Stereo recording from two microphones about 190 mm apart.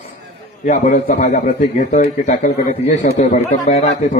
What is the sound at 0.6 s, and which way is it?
Speech, 40° left (ahead or behind).